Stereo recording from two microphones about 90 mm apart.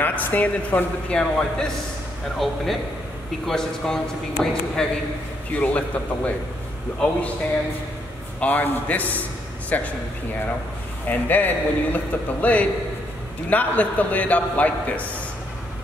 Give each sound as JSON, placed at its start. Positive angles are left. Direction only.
{"t": 0.0, "sound": "a man's voice", "side_deg": 20}
{"t": 2.4, "sound": "a man's voice", "side_deg": 0}
{"t": 8.4, "sound": "a man's voice", "side_deg": 15}
{"t": 11.1, "sound": "a man's voice", "side_deg": 20}